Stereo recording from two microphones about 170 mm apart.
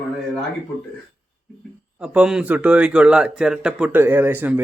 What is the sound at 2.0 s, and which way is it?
Speech, 5° right (ahead or behind).